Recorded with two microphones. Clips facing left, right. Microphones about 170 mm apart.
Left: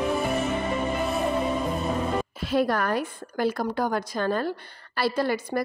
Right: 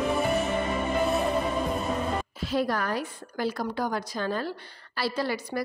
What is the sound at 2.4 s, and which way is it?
A woman's voice, 55° left (ahead or behind).